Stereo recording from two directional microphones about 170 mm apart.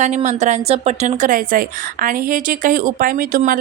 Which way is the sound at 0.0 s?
45° right (ahead or behind).